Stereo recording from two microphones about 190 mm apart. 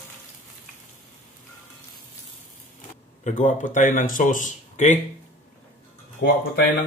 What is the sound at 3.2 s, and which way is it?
Speech, 40° left (ahead or behind).